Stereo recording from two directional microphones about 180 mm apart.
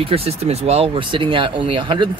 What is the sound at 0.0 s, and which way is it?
Speech, 35° right (ahead or behind).